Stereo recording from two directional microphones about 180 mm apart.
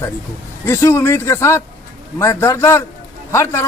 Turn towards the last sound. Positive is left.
turn(degrees=15)  # may be behind; listen again after turning